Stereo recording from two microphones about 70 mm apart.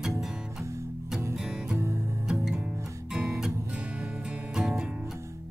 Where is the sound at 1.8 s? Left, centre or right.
Right.